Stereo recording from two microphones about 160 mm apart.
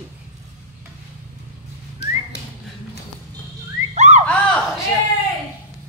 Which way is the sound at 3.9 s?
45° right (ahead or behind).